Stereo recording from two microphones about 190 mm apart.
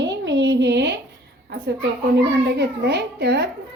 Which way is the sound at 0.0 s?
70° right (ahead or behind).